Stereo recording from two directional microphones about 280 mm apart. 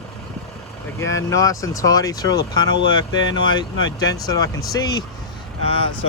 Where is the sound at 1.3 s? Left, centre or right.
Centre.